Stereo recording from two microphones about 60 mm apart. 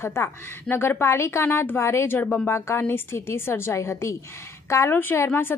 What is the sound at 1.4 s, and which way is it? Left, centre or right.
A woman's voice, left.